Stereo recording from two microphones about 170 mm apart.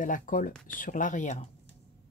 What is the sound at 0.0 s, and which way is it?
Speech, 50° left (ahead or behind).